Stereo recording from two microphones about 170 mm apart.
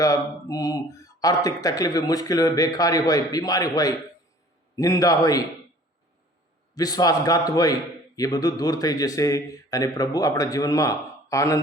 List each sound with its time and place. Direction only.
0.0 s a man's voice: 20° left (ahead or behind)
6.7 s a man's voice: 20° left (ahead or behind)